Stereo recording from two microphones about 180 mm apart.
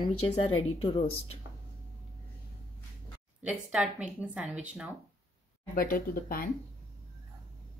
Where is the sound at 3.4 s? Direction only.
5° right (ahead or behind).